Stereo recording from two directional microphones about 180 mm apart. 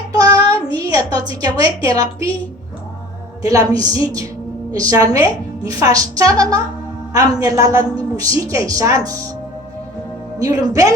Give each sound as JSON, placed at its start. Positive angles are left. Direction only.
{"t": 0.1, "sound": "child singing", "side_deg": -20}
{"t": 0.8, "sound": "a sound", "side_deg": -20}
{"t": 1.5, "sound": "a woman's voice", "side_deg": -20}
{"t": 3.4, "sound": "a woman's voice", "side_deg": -20}
{"t": 10.4, "sound": "a woman's voice", "side_deg": -20}